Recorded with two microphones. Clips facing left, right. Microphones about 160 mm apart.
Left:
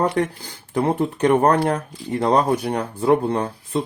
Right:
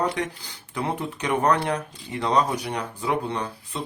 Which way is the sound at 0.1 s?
50° left (ahead or behind).